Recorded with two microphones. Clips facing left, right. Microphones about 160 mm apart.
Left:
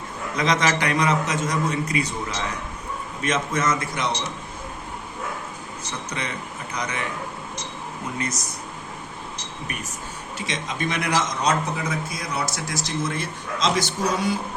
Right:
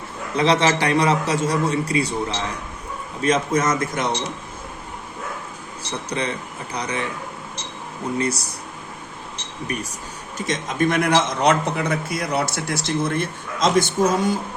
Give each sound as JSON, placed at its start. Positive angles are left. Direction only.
{"t": 0.3, "sound": "a man's voice", "side_deg": -30}
{"t": 3.2, "sound": "a man's voice", "side_deg": -35}
{"t": 6.1, "sound": "a man's voice", "side_deg": -35}
{"t": 8.2, "sound": "a man's voice", "side_deg": -35}
{"t": 10.3, "sound": "a man's voice", "side_deg": -45}